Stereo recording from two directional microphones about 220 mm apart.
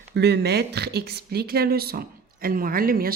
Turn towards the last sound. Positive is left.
turn(degrees=-40)  # may be behind; listen again after turning